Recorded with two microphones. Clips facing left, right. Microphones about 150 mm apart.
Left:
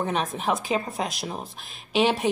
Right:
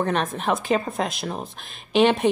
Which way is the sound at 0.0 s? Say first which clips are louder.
Right 3 dB; 5° left (ahead or behind).